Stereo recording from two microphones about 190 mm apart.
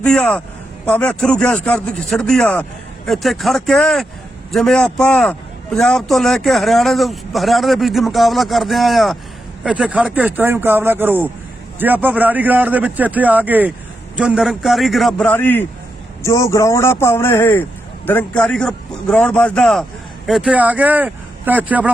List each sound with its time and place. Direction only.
0.0 s a man's voice: 5° left (ahead or behind)